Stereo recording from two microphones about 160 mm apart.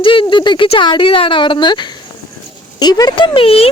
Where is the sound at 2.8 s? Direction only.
25° left (ahead or behind).